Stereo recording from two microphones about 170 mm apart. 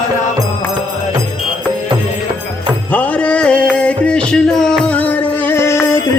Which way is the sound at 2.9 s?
10° left (ahead or behind).